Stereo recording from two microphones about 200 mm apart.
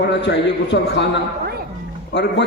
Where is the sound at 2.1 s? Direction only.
60° left (ahead or behind).